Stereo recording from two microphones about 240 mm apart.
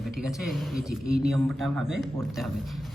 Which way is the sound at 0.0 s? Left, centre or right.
Centre.